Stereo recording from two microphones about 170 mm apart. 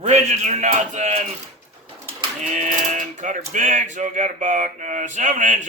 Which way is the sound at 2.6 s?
45° right (ahead or behind).